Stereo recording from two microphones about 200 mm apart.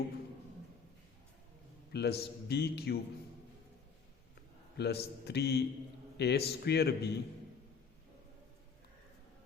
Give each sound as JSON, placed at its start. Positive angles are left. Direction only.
{"t": 1.9, "sound": "a man's voice", "side_deg": 55}
{"t": 4.8, "sound": "a man's voice", "side_deg": 55}